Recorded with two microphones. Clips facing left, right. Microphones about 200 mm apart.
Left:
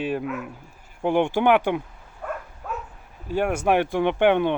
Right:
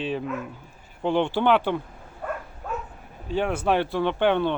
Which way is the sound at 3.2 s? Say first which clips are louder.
Left 2 dB; 10° left (ahead or behind).